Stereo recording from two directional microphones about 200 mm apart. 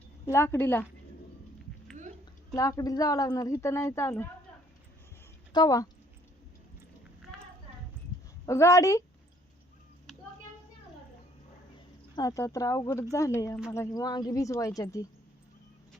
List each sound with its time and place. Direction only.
0.3 s speech: 10° left (ahead or behind)
2.6 s speech: 15° left (ahead or behind)
5.5 s speech: 20° left (ahead or behind)
8.4 s speech: 15° left (ahead or behind)
12.1 s speech: 15° left (ahead or behind)